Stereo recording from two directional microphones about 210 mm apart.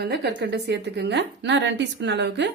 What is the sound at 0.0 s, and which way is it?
A woman's voice, 50° right (ahead or behind).